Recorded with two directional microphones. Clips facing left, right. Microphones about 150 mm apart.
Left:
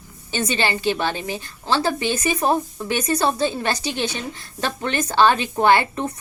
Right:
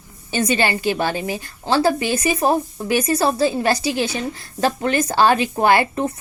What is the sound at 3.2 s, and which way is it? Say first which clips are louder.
Speech: right 3 dB; 35° right (ahead or behind).